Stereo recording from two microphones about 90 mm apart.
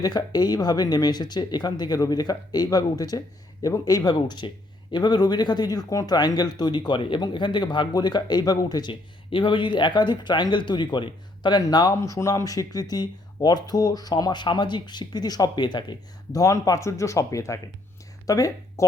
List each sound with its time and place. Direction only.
0.0 s speech: 50° left (ahead or behind)
8.9 s speech: 65° left (ahead or behind)
16.4 s speech: 40° left (ahead or behind)